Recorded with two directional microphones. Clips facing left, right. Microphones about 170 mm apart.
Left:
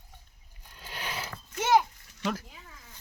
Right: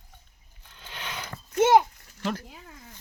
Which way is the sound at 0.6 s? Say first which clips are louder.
Left 1 dB; 10° left (ahead or behind).